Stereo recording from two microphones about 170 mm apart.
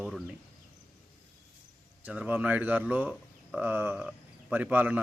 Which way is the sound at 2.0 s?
10° right (ahead or behind).